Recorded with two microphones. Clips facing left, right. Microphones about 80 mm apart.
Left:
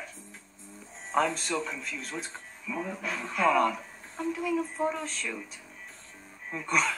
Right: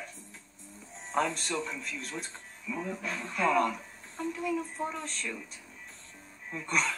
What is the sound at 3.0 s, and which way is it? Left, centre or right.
Speech, left.